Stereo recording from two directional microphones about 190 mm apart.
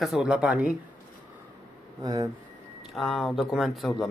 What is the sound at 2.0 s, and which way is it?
Speech, 15° right (ahead or behind).